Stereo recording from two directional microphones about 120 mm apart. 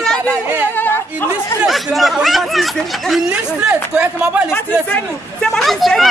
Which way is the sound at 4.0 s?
10° right (ahead or behind).